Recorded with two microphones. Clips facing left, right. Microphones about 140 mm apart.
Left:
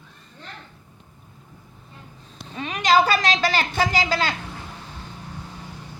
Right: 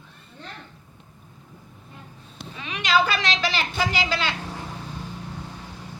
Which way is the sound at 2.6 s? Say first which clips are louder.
Left 4 dB; 45° left (ahead or behind).